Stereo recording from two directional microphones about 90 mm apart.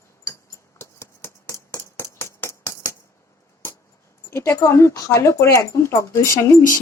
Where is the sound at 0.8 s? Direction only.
30° left (ahead or behind).